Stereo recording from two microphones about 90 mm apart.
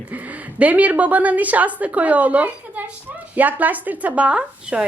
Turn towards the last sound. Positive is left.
turn(degrees=-10)  # may be behind; listen again after turning